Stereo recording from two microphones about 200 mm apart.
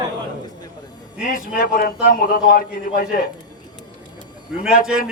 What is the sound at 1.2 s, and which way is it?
A man's voice, 40° left (ahead or behind).